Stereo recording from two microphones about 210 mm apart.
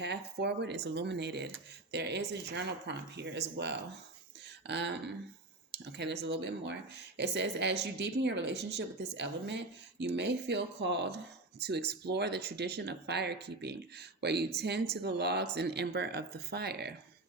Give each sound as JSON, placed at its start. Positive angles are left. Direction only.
{"t": 0.0, "sound": "speech", "side_deg": -50}